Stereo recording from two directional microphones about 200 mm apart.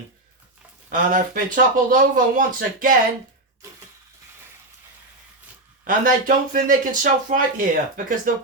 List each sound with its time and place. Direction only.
0.9 s speech: 45° right (ahead or behind)
5.8 s speech: 45° right (ahead or behind)